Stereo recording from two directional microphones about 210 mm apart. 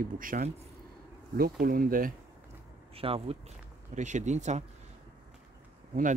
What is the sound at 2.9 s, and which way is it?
Speech, 25° right (ahead or behind).